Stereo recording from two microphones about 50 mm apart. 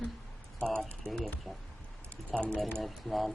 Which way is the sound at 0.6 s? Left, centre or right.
Centre.